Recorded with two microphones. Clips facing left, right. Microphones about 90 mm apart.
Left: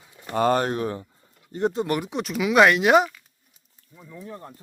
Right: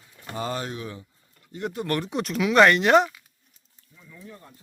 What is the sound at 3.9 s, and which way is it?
Speech, 40° left (ahead or behind).